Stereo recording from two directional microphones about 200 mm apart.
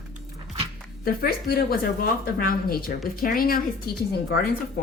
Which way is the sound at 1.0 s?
50° left (ahead or behind).